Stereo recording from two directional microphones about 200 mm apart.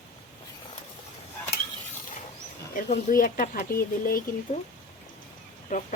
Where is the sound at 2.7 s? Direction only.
40° left (ahead or behind).